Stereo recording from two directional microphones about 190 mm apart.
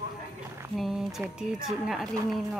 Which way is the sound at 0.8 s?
Centre (ahead or behind).